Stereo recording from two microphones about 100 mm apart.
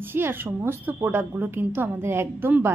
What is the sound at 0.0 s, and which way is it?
A woman's voice, 20° right (ahead or behind).